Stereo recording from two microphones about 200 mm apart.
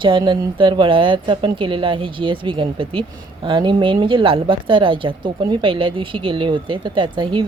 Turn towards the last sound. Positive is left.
turn(degrees=-25)  # may be behind; listen again after turning